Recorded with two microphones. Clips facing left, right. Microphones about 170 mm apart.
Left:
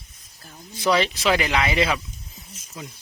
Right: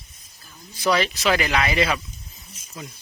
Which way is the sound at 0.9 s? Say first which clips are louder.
Left 1 dB; 25° left (ahead or behind).